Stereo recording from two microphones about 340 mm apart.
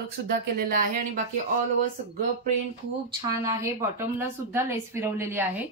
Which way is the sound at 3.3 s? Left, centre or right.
Centre.